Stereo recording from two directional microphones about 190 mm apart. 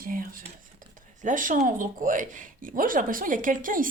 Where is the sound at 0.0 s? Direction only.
45° right (ahead or behind).